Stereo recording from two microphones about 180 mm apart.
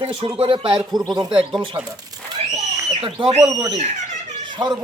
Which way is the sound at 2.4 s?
35° right (ahead or behind).